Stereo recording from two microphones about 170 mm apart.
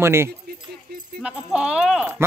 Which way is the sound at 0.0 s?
15° right (ahead or behind).